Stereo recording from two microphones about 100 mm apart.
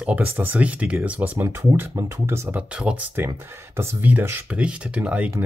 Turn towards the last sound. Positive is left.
turn(degrees=-10)  # may be behind; listen again after turning